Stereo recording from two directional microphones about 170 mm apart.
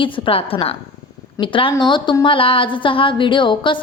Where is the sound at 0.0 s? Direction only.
30° left (ahead or behind).